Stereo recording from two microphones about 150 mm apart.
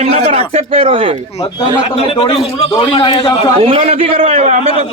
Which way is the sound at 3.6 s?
40° right (ahead or behind).